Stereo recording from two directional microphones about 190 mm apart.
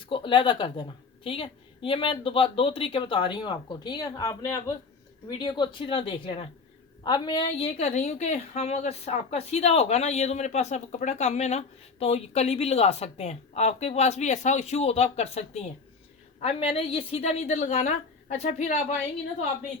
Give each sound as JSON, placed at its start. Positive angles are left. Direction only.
{"t": 0.0, "sound": "a woman's voice", "side_deg": 25}